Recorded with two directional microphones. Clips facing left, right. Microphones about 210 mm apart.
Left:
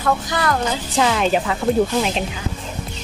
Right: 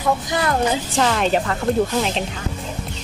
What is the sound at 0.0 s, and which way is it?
Speech, 20° right (ahead or behind).